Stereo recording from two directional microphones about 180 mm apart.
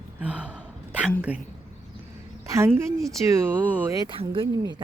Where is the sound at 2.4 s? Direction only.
15° right (ahead or behind).